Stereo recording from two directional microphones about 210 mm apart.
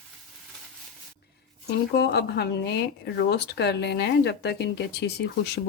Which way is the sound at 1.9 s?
50° left (ahead or behind).